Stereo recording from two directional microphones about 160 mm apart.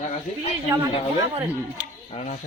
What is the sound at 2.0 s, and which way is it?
Speech, 50° left (ahead or behind).